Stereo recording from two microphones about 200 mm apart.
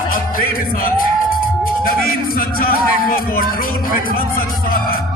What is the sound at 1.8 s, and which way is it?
Speech, 45° left (ahead or behind).